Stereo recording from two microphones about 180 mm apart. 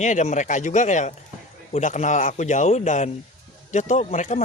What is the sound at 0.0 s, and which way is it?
Speech, 40° left (ahead or behind).